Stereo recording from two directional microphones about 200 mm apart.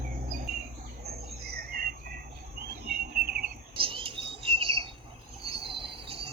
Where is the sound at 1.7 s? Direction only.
45° right (ahead or behind).